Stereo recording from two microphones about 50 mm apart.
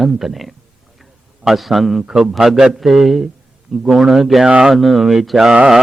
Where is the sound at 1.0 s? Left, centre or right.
Centre.